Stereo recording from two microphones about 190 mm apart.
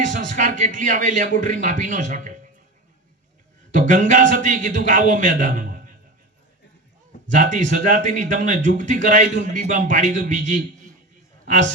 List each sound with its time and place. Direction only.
0.0 s a man's voice: 40° right (ahead or behind)
3.8 s a man's voice: 40° right (ahead or behind)
7.3 s a man's voice: 40° right (ahead or behind)